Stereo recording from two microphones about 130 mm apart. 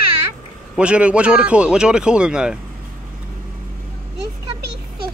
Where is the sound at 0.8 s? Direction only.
10° right (ahead or behind).